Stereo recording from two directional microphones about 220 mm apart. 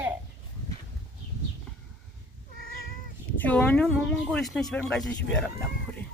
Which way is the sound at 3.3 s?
5° left (ahead or behind).